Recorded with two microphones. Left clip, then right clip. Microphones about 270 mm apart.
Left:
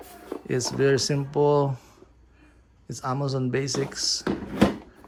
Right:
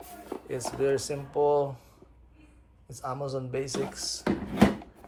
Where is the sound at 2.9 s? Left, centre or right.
Left.